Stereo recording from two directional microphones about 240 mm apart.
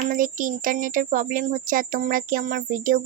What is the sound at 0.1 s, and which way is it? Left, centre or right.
Speech, right.